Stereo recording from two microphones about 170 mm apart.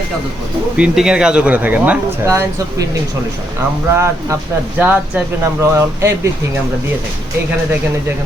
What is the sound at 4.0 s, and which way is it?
Speech, 15° right (ahead or behind).